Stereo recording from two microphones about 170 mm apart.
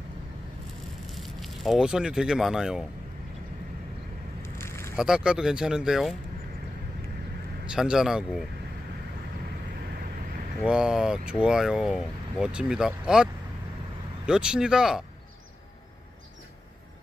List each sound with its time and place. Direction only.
1.0 s speech: centre (ahead or behind)
4.4 s a sound: 15° left (ahead or behind)
4.9 s speech: 5° right (ahead or behind)
7.6 s speech: 5° right (ahead or behind)
10.6 s speech: 5° right (ahead or behind)